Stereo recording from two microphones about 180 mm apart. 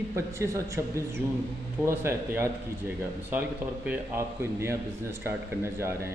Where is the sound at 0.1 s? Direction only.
15° right (ahead or behind).